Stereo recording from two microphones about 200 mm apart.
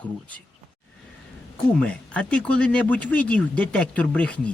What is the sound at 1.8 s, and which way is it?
Speech, 5° left (ahead or behind).